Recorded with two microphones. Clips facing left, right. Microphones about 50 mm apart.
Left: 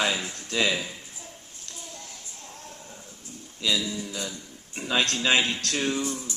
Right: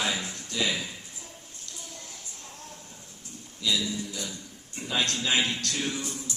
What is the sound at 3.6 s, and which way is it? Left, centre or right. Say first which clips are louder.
Speech: left 1 dB; left.